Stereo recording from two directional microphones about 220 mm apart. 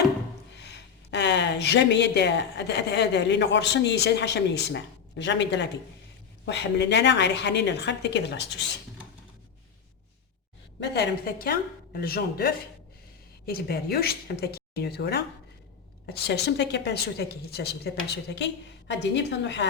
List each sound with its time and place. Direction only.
0.5 s a woman's voice: 50° left (ahead or behind)
10.8 s a woman's voice: 50° left (ahead or behind)